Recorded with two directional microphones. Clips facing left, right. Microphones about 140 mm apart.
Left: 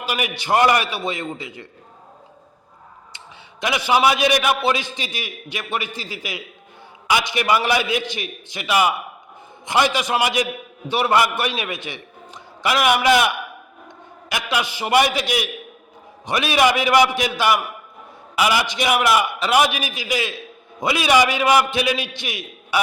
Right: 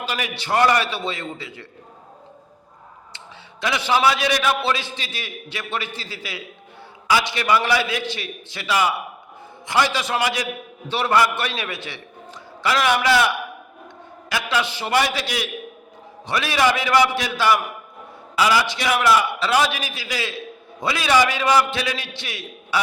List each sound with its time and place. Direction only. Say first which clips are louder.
0.0 s a man's voice: left 2 dB; 15° left (ahead or behind)
3.6 s a man's voice: left 2 dB; 15° left (ahead or behind)